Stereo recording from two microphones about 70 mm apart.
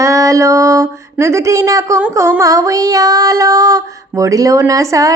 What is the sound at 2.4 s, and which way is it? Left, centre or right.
Female singing, right.